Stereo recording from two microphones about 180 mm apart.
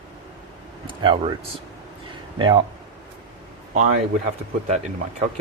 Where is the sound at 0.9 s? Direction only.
30° right (ahead or behind).